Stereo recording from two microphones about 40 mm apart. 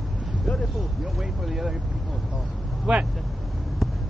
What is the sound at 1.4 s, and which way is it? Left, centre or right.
Speech, centre.